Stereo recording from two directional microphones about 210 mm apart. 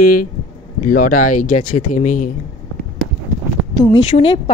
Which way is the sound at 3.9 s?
30° left (ahead or behind).